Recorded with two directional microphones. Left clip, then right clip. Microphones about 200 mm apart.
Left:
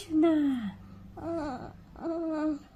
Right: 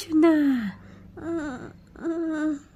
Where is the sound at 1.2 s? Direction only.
35° right (ahead or behind).